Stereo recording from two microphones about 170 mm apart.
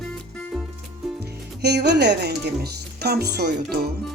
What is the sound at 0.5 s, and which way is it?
Music, centre (ahead or behind).